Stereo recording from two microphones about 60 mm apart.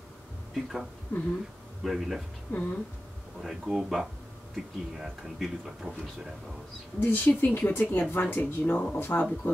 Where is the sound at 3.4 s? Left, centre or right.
Centre.